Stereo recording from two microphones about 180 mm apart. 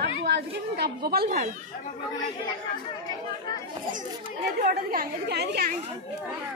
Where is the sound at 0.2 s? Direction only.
65° right (ahead or behind).